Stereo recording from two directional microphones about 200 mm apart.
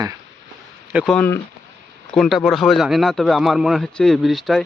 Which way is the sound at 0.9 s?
Centre (ahead or behind).